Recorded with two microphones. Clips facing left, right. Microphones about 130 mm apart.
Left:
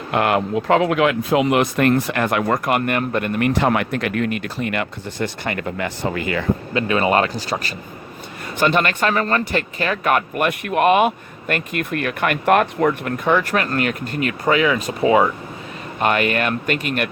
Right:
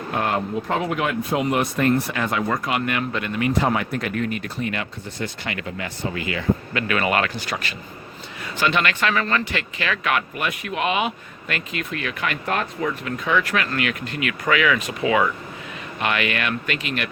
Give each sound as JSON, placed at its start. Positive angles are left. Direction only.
{"t": 0.1, "sound": "speech", "side_deg": 75}
{"t": 3.5, "sound": "speech", "side_deg": 70}
{"t": 5.5, "sound": "speech", "side_deg": 50}
{"t": 6.7, "sound": "speech", "side_deg": 30}